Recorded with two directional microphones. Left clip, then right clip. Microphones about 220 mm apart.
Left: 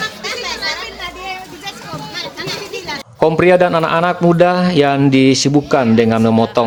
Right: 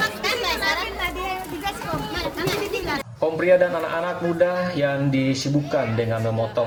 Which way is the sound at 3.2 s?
55° left (ahead or behind).